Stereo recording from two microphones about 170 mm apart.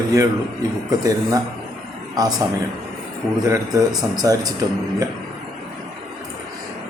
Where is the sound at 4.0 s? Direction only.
25° right (ahead or behind).